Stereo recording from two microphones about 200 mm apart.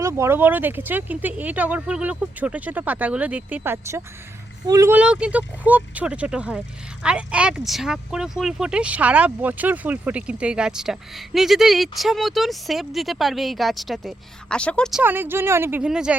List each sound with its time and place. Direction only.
0.0 s speech: 15° right (ahead or behind)